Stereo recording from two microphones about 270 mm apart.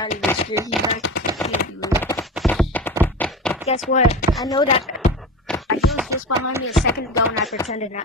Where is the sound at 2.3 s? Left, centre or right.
Centre.